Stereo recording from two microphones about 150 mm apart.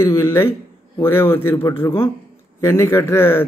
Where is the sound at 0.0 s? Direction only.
20° left (ahead or behind).